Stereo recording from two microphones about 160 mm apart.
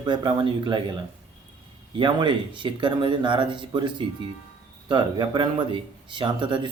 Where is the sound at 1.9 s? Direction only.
30° right (ahead or behind).